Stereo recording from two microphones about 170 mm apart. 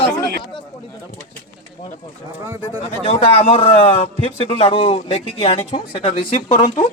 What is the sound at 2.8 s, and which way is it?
A man's voice, 35° left (ahead or behind).